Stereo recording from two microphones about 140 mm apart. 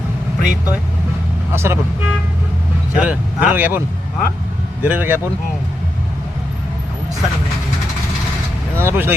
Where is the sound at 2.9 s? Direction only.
10° right (ahead or behind).